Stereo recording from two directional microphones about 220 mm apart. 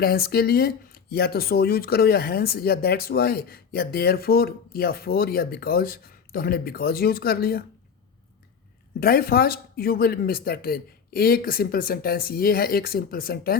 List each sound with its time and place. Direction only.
0.0 s speech: 45° left (ahead or behind)
9.0 s speech: 45° left (ahead or behind)